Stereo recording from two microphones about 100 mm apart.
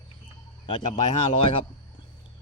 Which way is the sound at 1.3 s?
60° left (ahead or behind).